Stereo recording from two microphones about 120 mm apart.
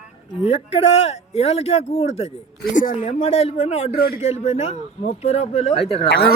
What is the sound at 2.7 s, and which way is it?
Speech, 90° left.